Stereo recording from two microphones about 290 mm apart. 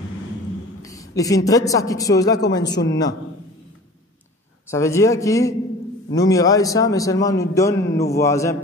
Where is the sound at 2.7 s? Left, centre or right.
Left.